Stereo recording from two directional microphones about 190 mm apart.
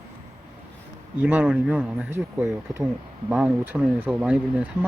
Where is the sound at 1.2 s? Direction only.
5° right (ahead or behind).